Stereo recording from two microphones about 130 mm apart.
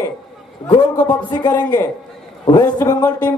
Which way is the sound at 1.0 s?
30° left (ahead or behind).